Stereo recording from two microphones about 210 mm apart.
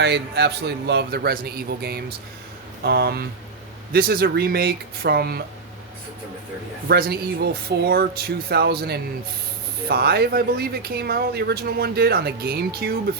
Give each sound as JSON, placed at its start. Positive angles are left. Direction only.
{"t": 0.0, "sound": "speech", "side_deg": -50}
{"t": 6.8, "sound": "speech", "side_deg": -45}